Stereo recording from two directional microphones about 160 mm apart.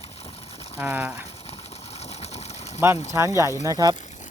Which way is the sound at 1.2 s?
40° left (ahead or behind).